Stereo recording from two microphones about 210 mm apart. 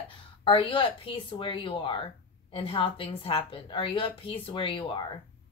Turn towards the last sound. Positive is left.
turn(degrees=25)  # may be behind; listen again after turning